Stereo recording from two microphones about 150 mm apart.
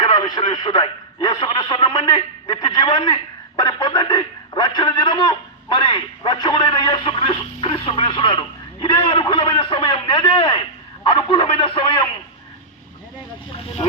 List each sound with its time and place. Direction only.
0.0 s a man's voice: 30° left (ahead or behind)